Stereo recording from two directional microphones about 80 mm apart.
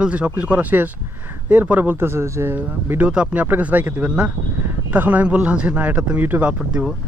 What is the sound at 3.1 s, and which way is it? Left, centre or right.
Speech, centre.